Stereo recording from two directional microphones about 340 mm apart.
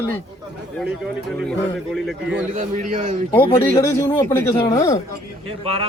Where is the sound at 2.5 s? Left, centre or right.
Right.